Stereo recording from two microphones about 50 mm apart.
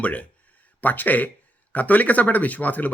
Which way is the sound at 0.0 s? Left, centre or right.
Left.